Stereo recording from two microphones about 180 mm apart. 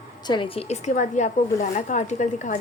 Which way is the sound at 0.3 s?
30° left (ahead or behind).